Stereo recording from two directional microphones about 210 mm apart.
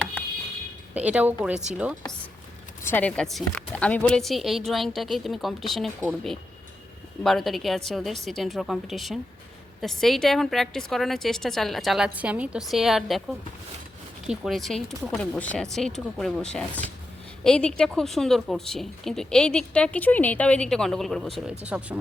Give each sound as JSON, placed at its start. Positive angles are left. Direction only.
{"t": 0.9, "sound": "a woman's voice", "side_deg": -5}
{"t": 2.8, "sound": "a woman's voice", "side_deg": 5}
{"t": 7.2, "sound": "a woman's voice", "side_deg": 0}
{"t": 14.3, "sound": "a woman's voice", "side_deg": 0}